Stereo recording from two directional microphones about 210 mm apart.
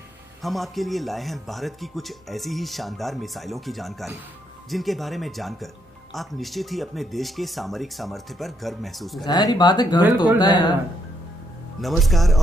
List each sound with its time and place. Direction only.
0.4 s speech: centre (ahead or behind)
9.2 s speech: 20° left (ahead or behind)
11.8 s speech: centre (ahead or behind)